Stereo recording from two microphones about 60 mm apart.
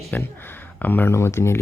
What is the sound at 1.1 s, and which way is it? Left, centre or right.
Speech, left.